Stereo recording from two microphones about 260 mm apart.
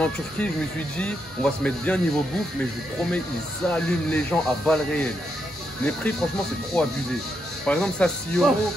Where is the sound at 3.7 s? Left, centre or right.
Centre.